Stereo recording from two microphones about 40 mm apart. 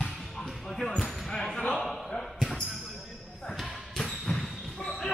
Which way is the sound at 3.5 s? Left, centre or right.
Centre.